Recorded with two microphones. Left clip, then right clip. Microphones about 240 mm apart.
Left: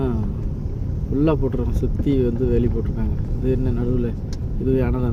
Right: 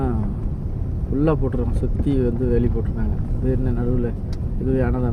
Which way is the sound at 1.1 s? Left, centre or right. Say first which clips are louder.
Left 1 dB; left.